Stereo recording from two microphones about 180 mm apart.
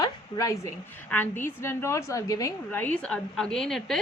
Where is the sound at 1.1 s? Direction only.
10° left (ahead or behind).